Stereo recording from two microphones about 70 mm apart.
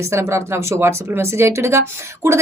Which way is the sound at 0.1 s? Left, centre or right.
Right.